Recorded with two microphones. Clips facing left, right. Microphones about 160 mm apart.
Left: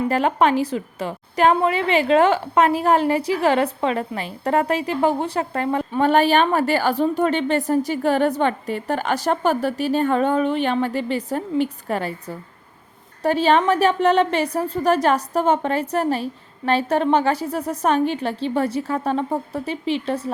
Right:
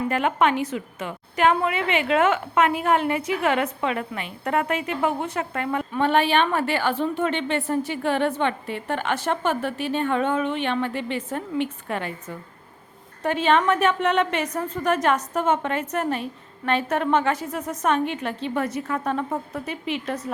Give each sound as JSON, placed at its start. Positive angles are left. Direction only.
{"t": 0.1, "sound": "a woman's voice", "side_deg": 35}